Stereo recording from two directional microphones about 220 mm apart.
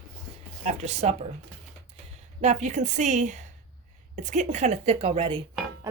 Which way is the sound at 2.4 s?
30° right (ahead or behind).